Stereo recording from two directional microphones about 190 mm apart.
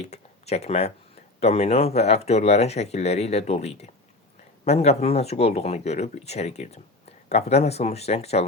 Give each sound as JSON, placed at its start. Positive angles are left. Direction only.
{"t": 0.0, "sound": "speech", "side_deg": 35}